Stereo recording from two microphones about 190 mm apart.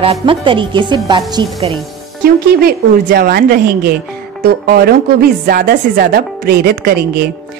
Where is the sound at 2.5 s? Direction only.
55° right (ahead or behind).